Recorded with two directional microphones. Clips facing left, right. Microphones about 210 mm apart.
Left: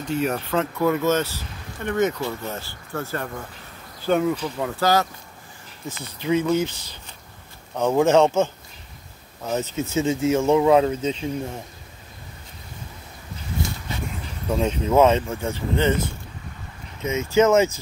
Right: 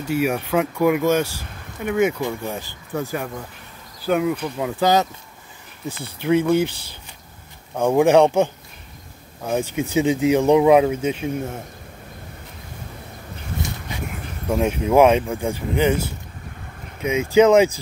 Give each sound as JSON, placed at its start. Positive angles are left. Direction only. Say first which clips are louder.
{"t": 0.0, "sound": "speech", "louder": "right 3 dB", "side_deg": -10}
{"t": 4.6, "sound": "speech", "louder": "right 4 dB", "side_deg": -15}
{"t": 6.3, "sound": "speech", "louder": "right 3 dB", "side_deg": -10}
{"t": 7.7, "sound": "speech", "louder": "right 3 dB", "side_deg": -15}
{"t": 14.0, "sound": "speech", "louder": "right 3 dB", "side_deg": -10}